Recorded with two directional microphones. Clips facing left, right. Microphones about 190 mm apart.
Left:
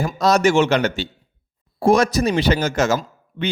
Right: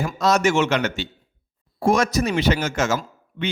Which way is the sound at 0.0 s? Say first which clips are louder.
Left 3 dB; 35° left (ahead or behind).